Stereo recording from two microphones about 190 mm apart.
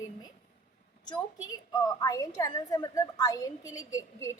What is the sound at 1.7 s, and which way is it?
A woman's voice, 20° left (ahead or behind).